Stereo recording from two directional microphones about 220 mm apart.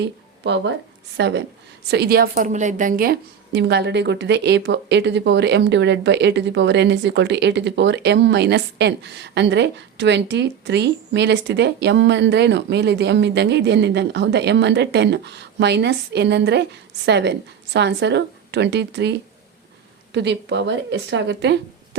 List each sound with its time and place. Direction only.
0.0 s a woman's voice: 50° right (ahead or behind)
20.1 s a woman's voice: 55° right (ahead or behind)